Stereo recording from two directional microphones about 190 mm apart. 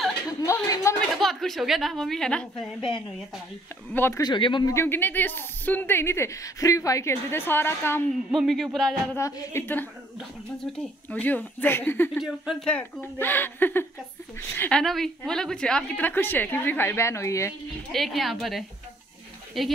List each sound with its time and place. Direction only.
0.5 s a sound: 15° left (ahead or behind)
1.1 s a woman's voice: centre (ahead or behind)
3.9 s speech: 15° left (ahead or behind)
8.3 s a woman's voice: centre (ahead or behind)
9.1 s speech: 15° left (ahead or behind)
12.1 s speech: centre (ahead or behind); by 17.6 s 15° left (ahead or behind)
17.9 s a woman's voice: centre (ahead or behind)